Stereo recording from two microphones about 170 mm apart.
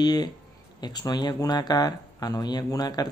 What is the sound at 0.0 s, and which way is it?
Speech, 25° left (ahead or behind).